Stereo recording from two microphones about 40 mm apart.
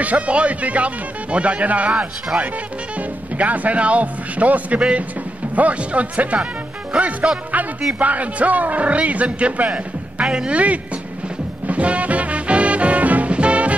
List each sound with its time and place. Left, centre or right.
0.0 s speech: right
2.3 s speech: right
3.0 s speech: right
10.2 s speech: centre
10.5 s speech: right
11.6 s music: right